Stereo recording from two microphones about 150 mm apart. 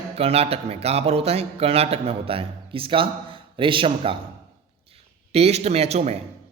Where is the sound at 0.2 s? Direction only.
40° right (ahead or behind).